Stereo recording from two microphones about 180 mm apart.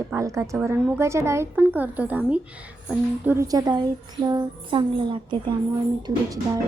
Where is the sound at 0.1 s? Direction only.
15° right (ahead or behind).